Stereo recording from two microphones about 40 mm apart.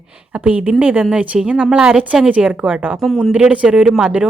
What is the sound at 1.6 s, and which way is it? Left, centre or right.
Speech, right.